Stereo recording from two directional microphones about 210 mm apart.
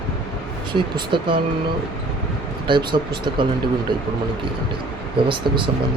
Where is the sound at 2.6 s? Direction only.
25° right (ahead or behind).